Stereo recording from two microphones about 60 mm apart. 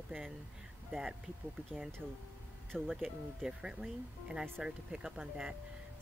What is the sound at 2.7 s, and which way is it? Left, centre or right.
Speech, centre.